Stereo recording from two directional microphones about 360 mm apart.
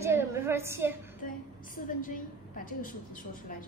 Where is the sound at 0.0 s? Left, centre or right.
Centre.